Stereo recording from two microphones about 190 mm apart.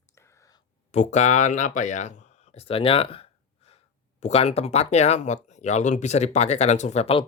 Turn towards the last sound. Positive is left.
turn(degrees=30)  # may be behind; listen again after turning